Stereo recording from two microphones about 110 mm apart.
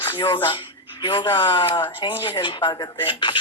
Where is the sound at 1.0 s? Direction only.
45° left (ahead or behind).